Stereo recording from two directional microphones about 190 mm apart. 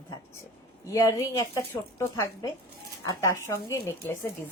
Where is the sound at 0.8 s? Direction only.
15° left (ahead or behind).